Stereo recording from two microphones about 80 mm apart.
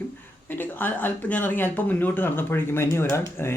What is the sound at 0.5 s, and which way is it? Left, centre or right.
Speech, left.